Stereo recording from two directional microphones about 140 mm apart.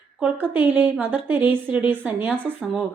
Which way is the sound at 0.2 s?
10° right (ahead or behind).